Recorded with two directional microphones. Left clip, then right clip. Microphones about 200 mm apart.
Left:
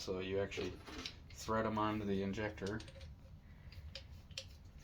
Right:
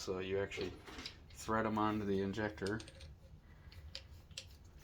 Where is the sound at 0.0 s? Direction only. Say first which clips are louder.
Right 1 dB; 15° right (ahead or behind).